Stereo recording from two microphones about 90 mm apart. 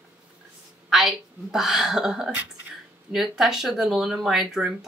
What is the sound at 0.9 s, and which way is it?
Speech, 5° right (ahead or behind).